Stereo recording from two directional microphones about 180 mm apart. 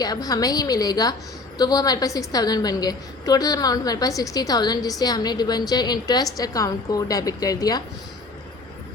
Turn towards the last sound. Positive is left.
turn(degrees=20)  # may be behind; listen again after turning